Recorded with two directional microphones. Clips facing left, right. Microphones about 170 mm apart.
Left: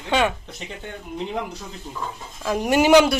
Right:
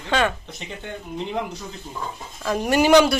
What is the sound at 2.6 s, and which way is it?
Speech, 15° left (ahead or behind).